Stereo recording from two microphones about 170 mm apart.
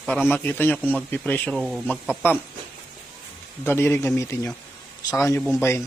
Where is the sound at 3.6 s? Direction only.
15° left (ahead or behind).